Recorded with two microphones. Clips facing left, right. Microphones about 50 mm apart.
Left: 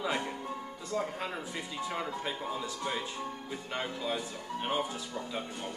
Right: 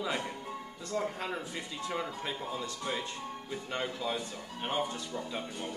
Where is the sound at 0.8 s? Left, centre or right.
Centre.